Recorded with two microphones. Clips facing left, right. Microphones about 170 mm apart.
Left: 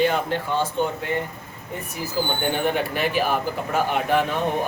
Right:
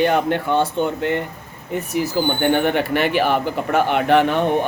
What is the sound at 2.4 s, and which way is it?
A man's voice, 65° right (ahead or behind).